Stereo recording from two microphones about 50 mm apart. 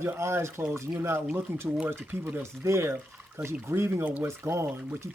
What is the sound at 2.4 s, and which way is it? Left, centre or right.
Speech, right.